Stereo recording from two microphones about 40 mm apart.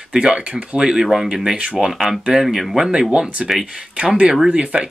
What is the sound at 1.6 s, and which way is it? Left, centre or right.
Speech, right.